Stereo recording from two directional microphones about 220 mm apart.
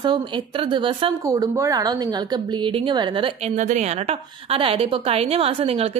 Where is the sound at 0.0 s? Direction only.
20° right (ahead or behind).